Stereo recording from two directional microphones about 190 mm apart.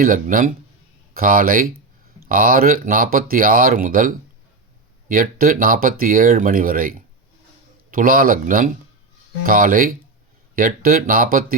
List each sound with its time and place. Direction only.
0.0 s speech: 45° right (ahead or behind)